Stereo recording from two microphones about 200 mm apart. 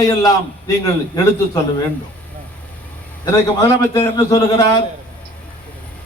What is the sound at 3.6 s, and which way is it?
A man's voice, 15° left (ahead or behind).